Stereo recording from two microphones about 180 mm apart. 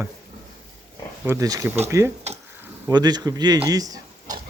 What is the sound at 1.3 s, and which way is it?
Speech, 20° right (ahead or behind).